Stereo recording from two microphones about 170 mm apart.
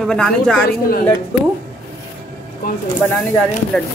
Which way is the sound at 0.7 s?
60° left (ahead or behind).